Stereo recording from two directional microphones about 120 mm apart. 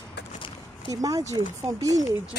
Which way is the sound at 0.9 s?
30° right (ahead or behind).